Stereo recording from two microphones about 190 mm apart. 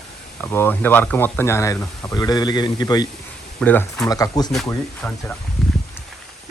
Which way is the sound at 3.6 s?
10° left (ahead or behind).